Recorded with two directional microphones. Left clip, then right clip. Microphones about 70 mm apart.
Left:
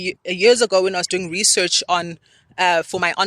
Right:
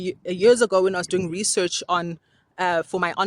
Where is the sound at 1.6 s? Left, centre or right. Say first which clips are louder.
Left 5 dB; right.